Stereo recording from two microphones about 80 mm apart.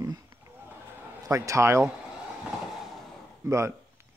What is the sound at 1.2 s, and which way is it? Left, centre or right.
Speech, right.